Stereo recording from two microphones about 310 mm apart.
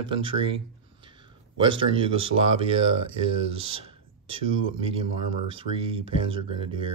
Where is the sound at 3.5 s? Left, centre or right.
Centre.